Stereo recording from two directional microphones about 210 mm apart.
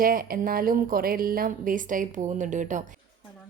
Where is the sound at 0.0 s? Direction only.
45° right (ahead or behind).